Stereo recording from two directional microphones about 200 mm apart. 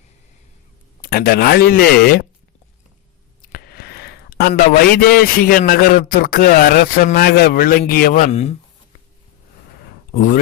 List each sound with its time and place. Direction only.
1.0 s speech: 50° left (ahead or behind)
3.5 s a sound: 50° left (ahead or behind)
5.0 s speech: 50° left (ahead or behind); by 8.5 s 30° left (ahead or behind)